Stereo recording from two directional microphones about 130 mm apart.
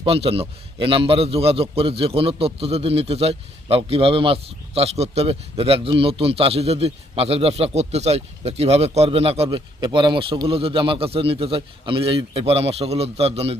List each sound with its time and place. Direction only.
0.0 s a man's voice: 45° right (ahead or behind)